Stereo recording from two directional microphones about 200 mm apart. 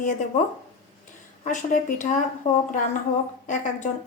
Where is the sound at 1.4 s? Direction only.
40° left (ahead or behind).